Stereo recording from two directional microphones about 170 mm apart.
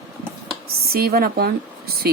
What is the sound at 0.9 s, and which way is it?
Speech, 65° right (ahead or behind).